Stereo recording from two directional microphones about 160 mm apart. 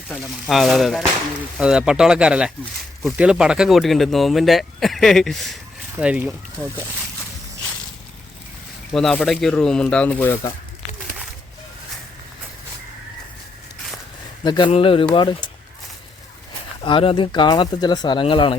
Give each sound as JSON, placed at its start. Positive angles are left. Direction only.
{"t": 0.1, "sound": "speech", "side_deg": 0}
{"t": 8.9, "sound": "speech", "side_deg": 0}
{"t": 14.4, "sound": "speech", "side_deg": 30}
{"t": 16.8, "sound": "speech", "side_deg": 35}